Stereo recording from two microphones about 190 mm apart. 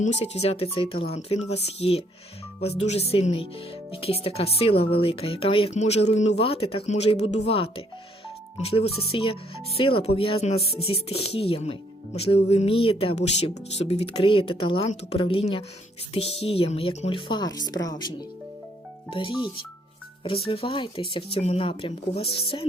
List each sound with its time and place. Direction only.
0.0 s speech: 35° left (ahead or behind)